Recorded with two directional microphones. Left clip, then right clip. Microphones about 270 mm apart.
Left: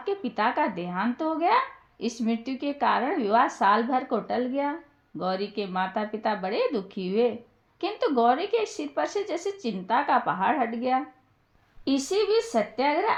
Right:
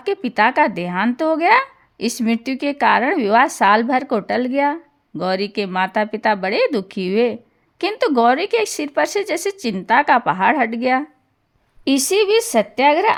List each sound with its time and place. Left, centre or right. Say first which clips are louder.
0.0 s speech: right 10 dB; right